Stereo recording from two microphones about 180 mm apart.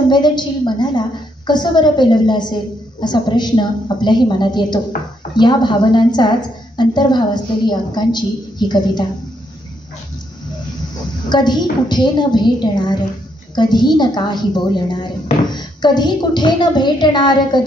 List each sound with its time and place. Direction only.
0.1 s a woman's voice: 25° left (ahead or behind)
4.9 s speech: 50° left (ahead or behind)
5.3 s a woman's voice: 25° left (ahead or behind)
11.2 s a woman's voice: 25° left (ahead or behind)